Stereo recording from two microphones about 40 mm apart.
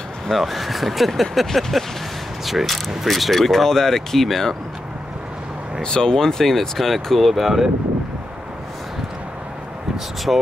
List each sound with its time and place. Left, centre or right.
0.3 s speech: centre
5.8 s speech: centre
10.3 s speech: right